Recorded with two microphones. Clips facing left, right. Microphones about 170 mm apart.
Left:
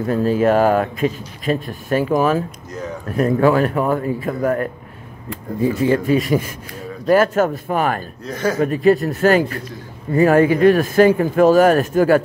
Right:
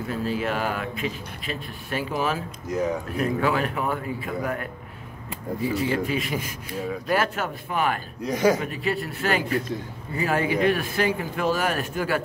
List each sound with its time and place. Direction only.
0.0 s speech: 45° left (ahead or behind)
8.2 s speech: 15° right (ahead or behind)
8.5 s speech: 45° left (ahead or behind)